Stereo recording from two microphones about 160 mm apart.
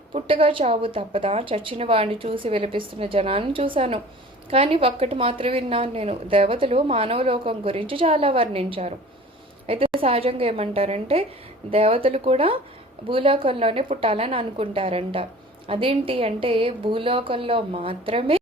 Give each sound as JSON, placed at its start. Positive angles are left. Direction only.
{"t": 0.1, "sound": "a woman's voice", "side_deg": -35}